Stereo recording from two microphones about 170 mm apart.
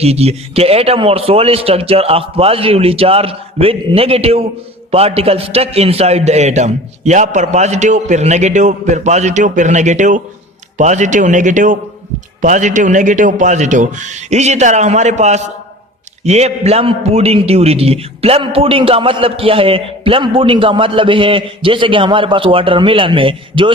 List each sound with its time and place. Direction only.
0.0 s a man's voice: 35° right (ahead or behind)